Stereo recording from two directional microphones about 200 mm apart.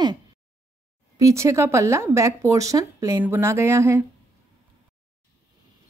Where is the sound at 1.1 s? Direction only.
15° right (ahead or behind).